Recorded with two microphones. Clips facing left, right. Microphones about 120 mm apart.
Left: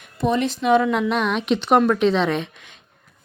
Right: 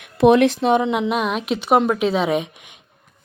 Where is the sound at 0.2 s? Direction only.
65° right (ahead or behind).